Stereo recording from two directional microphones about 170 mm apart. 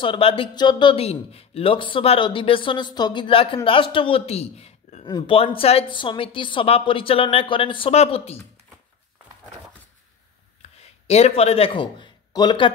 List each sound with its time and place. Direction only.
0.0 s speech: 30° left (ahead or behind)
10.6 s speech: 40° left (ahead or behind)